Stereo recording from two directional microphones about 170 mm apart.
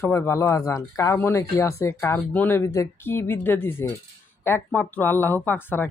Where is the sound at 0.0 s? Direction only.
15° left (ahead or behind).